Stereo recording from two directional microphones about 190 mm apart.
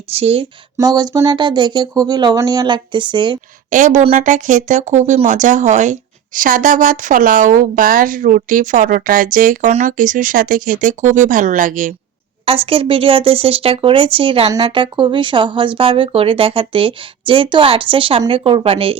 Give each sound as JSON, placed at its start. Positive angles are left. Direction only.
{"t": 0.1, "sound": "speech", "side_deg": -30}
{"t": 0.8, "sound": "speech", "side_deg": -20}
{"t": 3.7, "sound": "speech", "side_deg": -40}
{"t": 12.5, "sound": "speech", "side_deg": -30}